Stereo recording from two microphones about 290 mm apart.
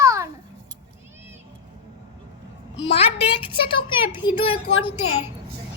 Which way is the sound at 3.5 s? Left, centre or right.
Centre.